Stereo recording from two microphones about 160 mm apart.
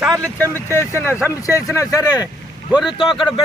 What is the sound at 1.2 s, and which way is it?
Speech, 10° right (ahead or behind).